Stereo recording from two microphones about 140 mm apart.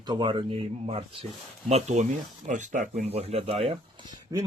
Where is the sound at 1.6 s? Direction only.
55° right (ahead or behind).